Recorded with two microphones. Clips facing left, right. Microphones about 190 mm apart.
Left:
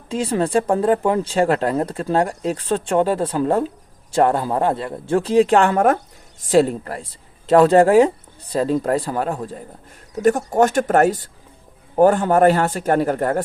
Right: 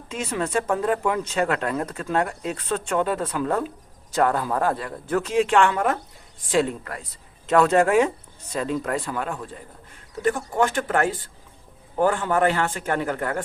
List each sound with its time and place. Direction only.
0.1 s speech: 35° left (ahead or behind)